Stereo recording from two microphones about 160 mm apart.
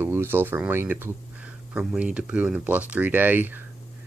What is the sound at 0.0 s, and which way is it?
Speech, 15° right (ahead or behind).